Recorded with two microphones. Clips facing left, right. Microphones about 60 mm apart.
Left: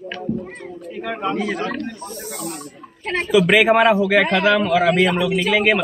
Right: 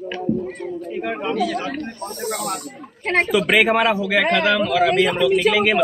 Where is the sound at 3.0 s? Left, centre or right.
Right.